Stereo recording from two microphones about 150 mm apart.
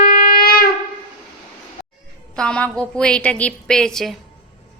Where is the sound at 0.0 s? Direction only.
70° left (ahead or behind).